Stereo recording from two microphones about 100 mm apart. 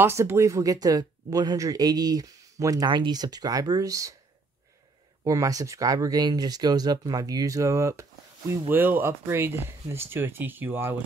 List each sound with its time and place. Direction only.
0.0 s speech: 25° right (ahead or behind)
5.2 s speech: 35° right (ahead or behind)
8.6 s speech: 20° right (ahead or behind)